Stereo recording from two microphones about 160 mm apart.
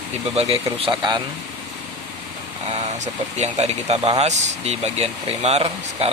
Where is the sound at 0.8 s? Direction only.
25° right (ahead or behind).